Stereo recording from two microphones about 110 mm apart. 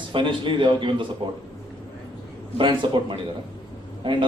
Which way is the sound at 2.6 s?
45° right (ahead or behind).